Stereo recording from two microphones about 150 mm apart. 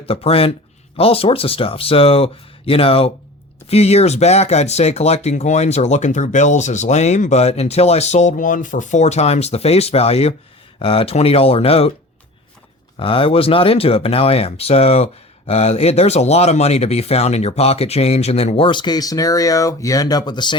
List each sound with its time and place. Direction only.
0.0 s speech: 40° left (ahead or behind)
13.0 s speech: 35° left (ahead or behind)